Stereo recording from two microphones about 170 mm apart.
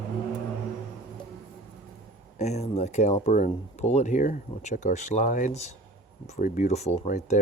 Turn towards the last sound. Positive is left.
turn(degrees=45)  # may be behind; listen again after turning